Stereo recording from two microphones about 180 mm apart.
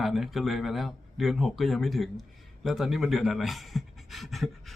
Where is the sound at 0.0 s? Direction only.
Centre (ahead or behind).